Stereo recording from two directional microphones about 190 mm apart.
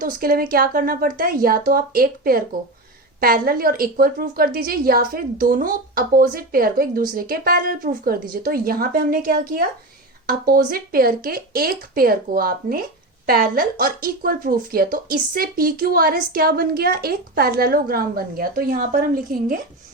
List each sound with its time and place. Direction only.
0.0 s speech: 50° right (ahead or behind)